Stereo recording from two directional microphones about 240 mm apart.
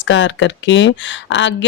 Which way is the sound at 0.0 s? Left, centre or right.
Left.